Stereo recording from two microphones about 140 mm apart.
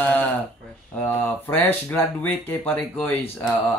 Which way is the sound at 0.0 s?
10° left (ahead or behind).